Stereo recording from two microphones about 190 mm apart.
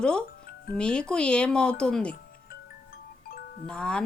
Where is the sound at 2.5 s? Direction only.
50° left (ahead or behind).